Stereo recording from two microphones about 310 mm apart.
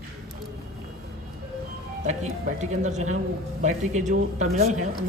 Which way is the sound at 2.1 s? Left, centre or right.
Right.